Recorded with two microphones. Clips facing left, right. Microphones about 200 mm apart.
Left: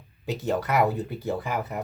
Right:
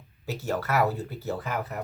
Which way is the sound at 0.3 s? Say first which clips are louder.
Left 3 dB; 15° left (ahead or behind).